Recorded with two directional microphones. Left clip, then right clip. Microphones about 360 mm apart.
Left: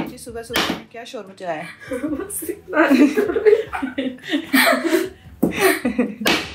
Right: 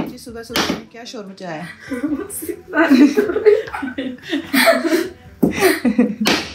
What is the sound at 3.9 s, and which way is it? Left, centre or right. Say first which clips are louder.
Speech: even; left.